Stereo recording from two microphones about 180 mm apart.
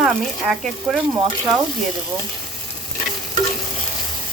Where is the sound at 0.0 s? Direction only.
Centre (ahead or behind).